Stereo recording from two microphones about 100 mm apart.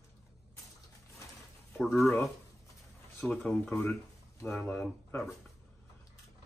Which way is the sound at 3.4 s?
5° left (ahead or behind).